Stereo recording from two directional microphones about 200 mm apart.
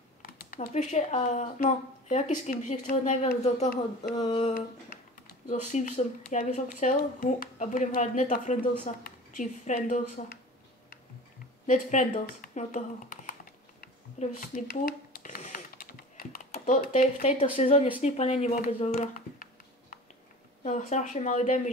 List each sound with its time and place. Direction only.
0.2 s a woman's voice: 40° left (ahead or behind)
11.6 s a woman's voice: 40° left (ahead or behind)
12.3 s computer keyboard: 45° left (ahead or behind)
17.6 s a woman's voice: 35° left (ahead or behind)